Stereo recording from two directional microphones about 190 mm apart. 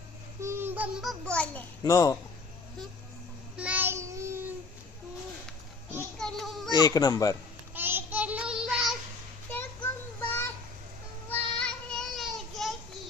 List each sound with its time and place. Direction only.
0.4 s a sound: 10° right (ahead or behind)
1.2 s a child's voice: 5° left (ahead or behind)
1.8 s speech: 20° left (ahead or behind)
3.6 s child singing: 10° right (ahead or behind)
6.1 s child singing: centre (ahead or behind)
6.7 s speech: 20° left (ahead or behind)
7.7 s child singing: 10° right (ahead or behind)
9.5 s child singing: 10° left (ahead or behind)